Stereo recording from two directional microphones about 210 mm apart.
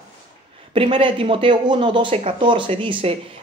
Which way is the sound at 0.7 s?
25° right (ahead or behind).